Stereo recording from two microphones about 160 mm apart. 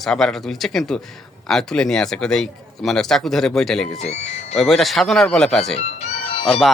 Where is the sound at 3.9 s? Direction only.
40° left (ahead or behind).